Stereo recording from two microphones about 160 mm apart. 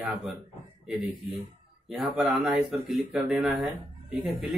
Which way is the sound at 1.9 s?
Centre (ahead or behind).